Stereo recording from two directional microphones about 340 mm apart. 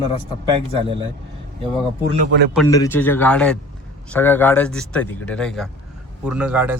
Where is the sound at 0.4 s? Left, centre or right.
Centre.